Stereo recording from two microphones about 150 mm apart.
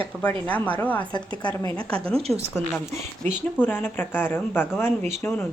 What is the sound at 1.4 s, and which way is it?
A woman's voice, 20° left (ahead or behind).